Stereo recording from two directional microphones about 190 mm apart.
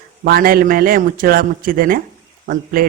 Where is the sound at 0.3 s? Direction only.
50° right (ahead or behind).